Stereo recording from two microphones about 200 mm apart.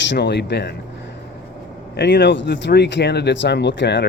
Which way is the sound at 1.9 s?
60° left (ahead or behind).